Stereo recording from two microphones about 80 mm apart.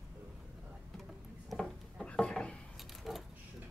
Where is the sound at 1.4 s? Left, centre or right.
Centre.